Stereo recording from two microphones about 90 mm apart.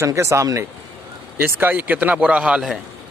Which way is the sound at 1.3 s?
20° right (ahead or behind).